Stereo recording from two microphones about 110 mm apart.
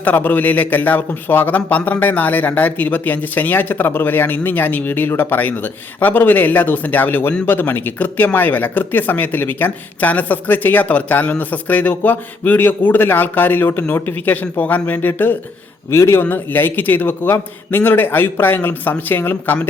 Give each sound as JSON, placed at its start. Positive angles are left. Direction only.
{"t": 0.0, "sound": "a man's voice", "side_deg": 15}